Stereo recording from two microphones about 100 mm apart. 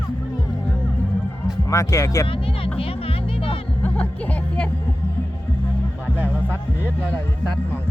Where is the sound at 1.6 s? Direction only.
30° left (ahead or behind).